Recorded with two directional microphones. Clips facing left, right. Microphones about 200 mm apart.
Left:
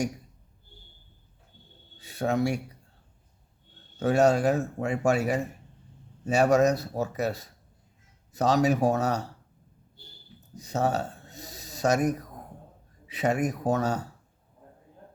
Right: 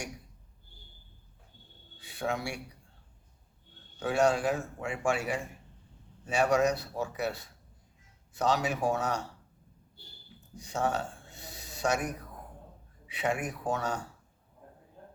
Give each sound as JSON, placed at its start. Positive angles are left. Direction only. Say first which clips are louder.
{"t": 2.0, "sound": "speech", "louder": "left 8 dB", "side_deg": 40}
{"t": 4.0, "sound": "speech", "louder": "left 5 dB", "side_deg": 40}
{"t": 10.5, "sound": "speech", "louder": "left 4 dB", "side_deg": 40}